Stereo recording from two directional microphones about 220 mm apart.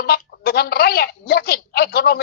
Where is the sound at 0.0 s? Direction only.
45° left (ahead or behind).